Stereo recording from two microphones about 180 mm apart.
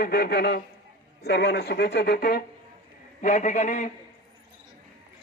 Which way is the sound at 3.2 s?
45° left (ahead or behind).